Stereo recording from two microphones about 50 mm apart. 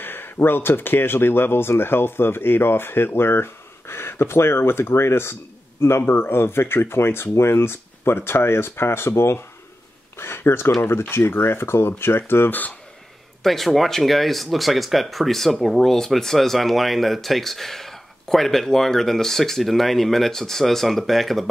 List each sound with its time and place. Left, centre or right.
0.0 s speech: left
13.4 s speech: centre